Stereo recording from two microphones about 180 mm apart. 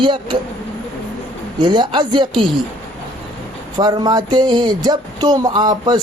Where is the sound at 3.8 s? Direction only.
25° right (ahead or behind).